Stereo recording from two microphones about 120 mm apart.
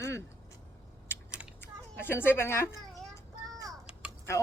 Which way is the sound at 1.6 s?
20° left (ahead or behind).